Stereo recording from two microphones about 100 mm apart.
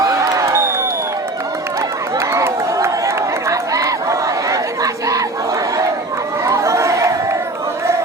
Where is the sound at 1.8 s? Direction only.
30° right (ahead or behind).